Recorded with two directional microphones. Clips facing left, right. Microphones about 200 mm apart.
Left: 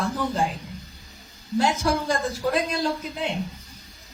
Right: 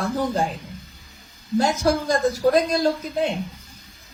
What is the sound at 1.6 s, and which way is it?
Speech, 40° right (ahead or behind).